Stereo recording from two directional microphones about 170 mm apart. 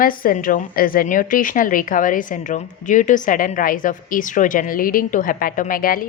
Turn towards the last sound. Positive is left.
turn(degrees=55)  # may be behind; listen again after turning